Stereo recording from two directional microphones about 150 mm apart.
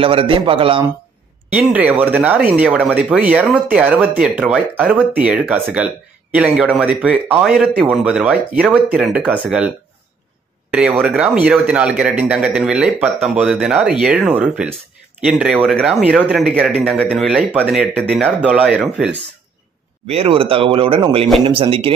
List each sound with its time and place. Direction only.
0.0 s speech: 35° right (ahead or behind)
1.5 s a man's voice: 10° right (ahead or behind)
10.7 s a man's voice: 5° right (ahead or behind)
20.1 s speech: 40° right (ahead or behind)